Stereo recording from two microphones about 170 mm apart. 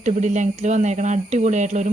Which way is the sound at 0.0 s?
45° right (ahead or behind).